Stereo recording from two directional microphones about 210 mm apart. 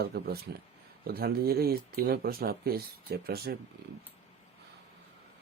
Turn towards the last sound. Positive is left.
turn(degrees=-45)  # may be behind; listen again after turning